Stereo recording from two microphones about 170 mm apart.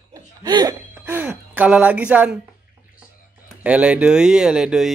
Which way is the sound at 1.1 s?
10° right (ahead or behind).